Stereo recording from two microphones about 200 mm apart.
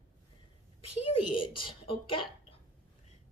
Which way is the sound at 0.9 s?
25° left (ahead or behind).